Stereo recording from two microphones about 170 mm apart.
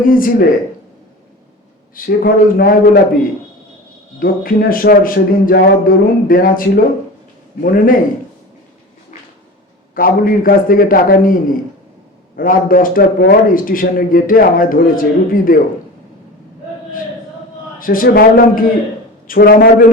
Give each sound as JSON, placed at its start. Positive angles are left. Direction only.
{"t": 0.0, "sound": "a man's voice", "side_deg": 55}
{"t": 2.0, "sound": "a man's voice", "side_deg": 60}
{"t": 4.2, "sound": "a man's voice", "side_deg": 55}
{"t": 7.6, "sound": "a man's voice", "side_deg": 55}
{"t": 9.9, "sound": "a man's voice", "side_deg": 55}
{"t": 17.7, "sound": "a man's voice", "side_deg": 55}